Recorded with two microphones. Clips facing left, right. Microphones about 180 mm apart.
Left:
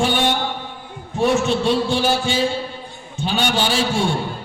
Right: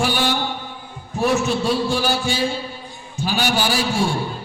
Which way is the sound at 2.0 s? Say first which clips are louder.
Left 2 dB; 20° left (ahead or behind).